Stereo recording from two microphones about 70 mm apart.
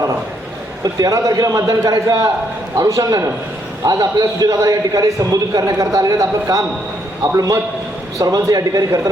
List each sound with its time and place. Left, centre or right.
1.0 s a man's voice: right